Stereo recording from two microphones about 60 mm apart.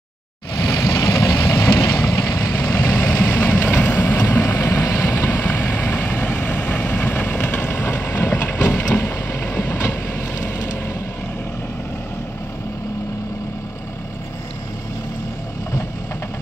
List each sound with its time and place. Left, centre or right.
0.7 s vehicle: left
2.5 s vehicle: left
4.3 s vehicle: left
5.3 s vehicle: left
8.3 s ratchet: left
8.6 s vehicle: left